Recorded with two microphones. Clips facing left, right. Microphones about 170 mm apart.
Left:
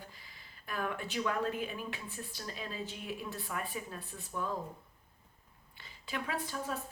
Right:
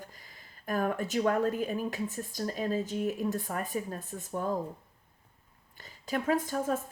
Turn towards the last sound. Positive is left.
turn(degrees=-45)  # may be behind; listen again after turning